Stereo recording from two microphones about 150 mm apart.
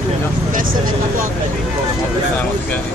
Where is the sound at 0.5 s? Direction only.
65° right (ahead or behind).